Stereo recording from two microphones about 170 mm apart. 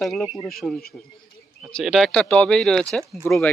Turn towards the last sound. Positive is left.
turn(degrees=10)  # may be behind; listen again after turning